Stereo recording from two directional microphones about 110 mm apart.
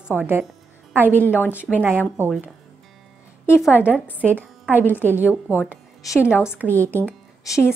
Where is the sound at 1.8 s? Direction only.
20° right (ahead or behind).